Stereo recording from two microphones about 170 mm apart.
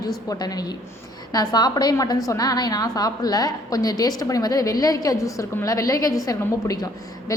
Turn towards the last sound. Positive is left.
turn(degrees=20)  # may be behind; listen again after turning